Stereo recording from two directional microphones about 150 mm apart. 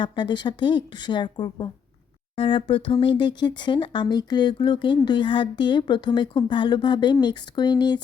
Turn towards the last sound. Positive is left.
turn(degrees=30)  # may be behind; listen again after turning